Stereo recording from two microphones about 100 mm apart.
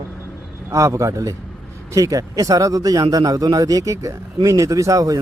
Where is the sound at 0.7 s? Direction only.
30° right (ahead or behind).